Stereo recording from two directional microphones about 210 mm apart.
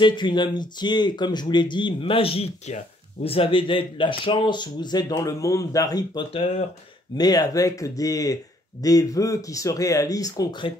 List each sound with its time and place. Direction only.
0.0 s speech: 20° left (ahead or behind)
7.2 s speech: 20° left (ahead or behind)